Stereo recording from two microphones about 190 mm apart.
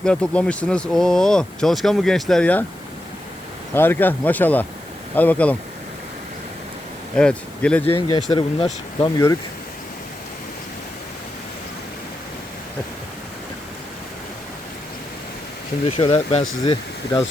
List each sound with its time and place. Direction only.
0.0 s speech: 5° left (ahead or behind)
3.8 s speech: 10° left (ahead or behind)
7.2 s speech: 5° left (ahead or behind)
7.9 s speech: 25° left (ahead or behind)
15.9 s speech: 30° left (ahead or behind)
16.6 s speech: 25° left (ahead or behind)